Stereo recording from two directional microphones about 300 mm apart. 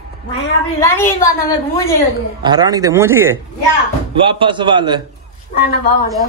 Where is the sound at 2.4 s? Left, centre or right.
Centre.